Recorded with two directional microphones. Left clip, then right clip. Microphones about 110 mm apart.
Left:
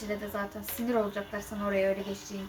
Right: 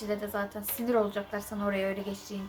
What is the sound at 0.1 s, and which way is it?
Speech, 30° right (ahead or behind).